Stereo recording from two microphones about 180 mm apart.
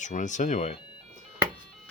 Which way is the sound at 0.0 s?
45° left (ahead or behind).